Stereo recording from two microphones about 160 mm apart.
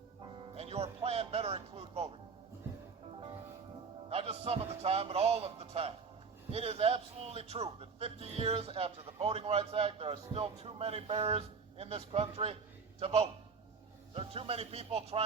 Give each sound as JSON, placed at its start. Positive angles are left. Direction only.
{"t": 0.5, "sound": "music", "side_deg": -40}
{"t": 4.1, "sound": "a sound", "side_deg": -40}
{"t": 6.5, "sound": "a man's voice", "side_deg": -40}